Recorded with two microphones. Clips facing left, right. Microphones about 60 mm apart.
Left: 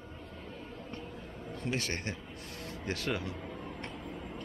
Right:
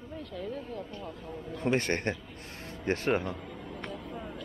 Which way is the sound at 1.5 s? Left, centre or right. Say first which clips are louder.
Right 7 dB; right.